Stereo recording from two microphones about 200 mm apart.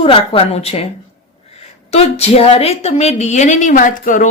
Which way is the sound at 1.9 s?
30° left (ahead or behind).